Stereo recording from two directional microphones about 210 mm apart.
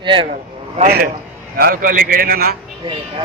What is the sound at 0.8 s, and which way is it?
A man's voice, 50° right (ahead or behind).